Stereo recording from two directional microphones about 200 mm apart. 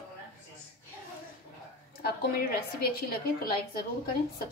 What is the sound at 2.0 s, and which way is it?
A woman's voice, 50° left (ahead or behind).